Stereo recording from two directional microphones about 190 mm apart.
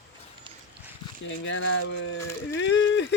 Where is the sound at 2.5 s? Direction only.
70° left (ahead or behind).